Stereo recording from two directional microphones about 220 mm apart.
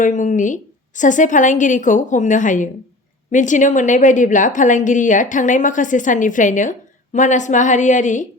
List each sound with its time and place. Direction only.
0.0 s a woman's voice: 35° left (ahead or behind)